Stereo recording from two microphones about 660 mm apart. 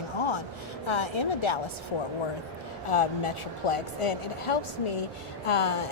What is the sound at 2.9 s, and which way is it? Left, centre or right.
A woman's voice, left.